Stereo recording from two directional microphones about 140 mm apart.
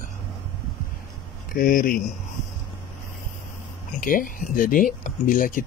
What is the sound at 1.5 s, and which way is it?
Speech, 80° left.